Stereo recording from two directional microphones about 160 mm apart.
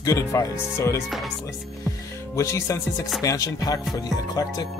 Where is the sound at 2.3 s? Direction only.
20° left (ahead or behind).